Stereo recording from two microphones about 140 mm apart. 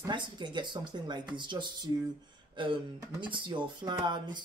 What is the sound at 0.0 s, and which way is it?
Speech, 35° right (ahead or behind).